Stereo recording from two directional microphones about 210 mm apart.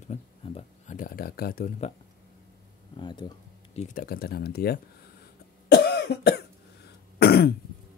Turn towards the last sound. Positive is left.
turn(degrees=50)  # may be behind; listen again after turning